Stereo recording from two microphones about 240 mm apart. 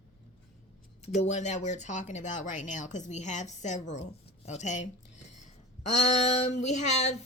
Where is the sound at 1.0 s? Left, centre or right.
Left.